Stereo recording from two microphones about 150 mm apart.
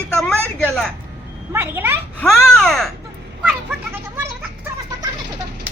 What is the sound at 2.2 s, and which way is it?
Speech, centre (ahead or behind).